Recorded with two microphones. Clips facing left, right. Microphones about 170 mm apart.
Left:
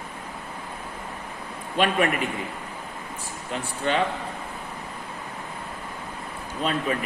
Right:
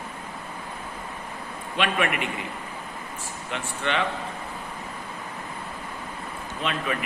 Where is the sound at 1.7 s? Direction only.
40° left (ahead or behind).